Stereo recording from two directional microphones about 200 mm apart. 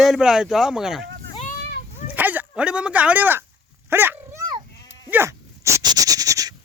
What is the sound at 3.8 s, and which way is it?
Dog, 10° right (ahead or behind).